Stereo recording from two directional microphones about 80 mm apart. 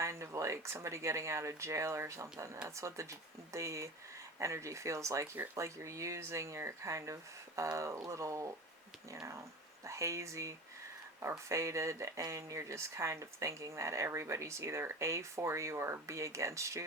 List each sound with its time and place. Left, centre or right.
0.0 s speech: right
9.8 s speech: right